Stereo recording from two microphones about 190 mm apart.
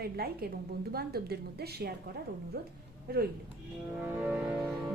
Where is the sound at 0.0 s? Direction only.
55° right (ahead or behind).